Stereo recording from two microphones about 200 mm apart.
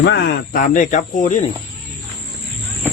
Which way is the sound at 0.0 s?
55° left (ahead or behind).